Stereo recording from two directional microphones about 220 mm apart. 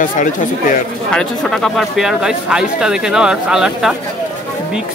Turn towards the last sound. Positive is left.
turn(degrees=-5)  # may be behind; listen again after turning